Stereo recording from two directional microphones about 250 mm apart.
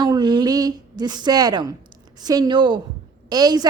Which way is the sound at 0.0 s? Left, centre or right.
Centre.